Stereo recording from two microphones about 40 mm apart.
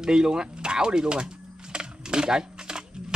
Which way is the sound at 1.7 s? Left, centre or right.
Right.